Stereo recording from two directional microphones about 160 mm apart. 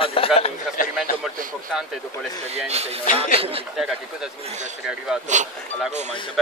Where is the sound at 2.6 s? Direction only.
40° right (ahead or behind).